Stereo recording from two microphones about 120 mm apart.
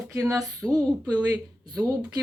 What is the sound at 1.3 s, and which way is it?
Speech, 30° right (ahead or behind).